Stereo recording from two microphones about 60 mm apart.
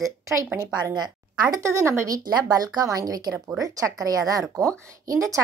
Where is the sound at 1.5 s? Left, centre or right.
Right.